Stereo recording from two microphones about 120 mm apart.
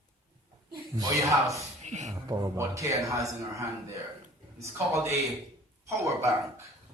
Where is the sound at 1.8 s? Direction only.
75° right (ahead or behind).